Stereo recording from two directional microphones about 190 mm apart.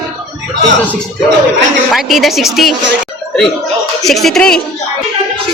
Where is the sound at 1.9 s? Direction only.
Centre (ahead or behind).